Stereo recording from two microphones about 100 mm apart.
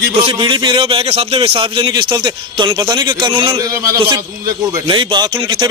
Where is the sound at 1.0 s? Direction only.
80° right; by 4.0 s 35° right (ahead or behind).